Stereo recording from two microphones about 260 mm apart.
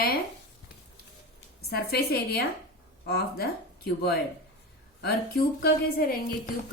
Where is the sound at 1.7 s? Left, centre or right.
Left.